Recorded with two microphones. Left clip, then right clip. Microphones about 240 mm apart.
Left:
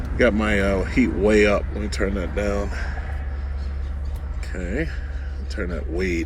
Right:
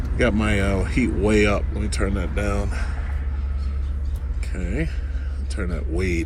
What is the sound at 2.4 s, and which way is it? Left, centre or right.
Speech, centre.